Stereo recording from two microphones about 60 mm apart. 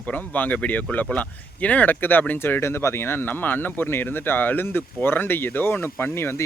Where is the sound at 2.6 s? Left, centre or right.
Left.